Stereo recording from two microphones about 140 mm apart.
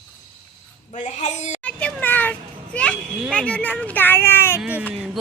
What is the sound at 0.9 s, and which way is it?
Speech, 60° left (ahead or behind).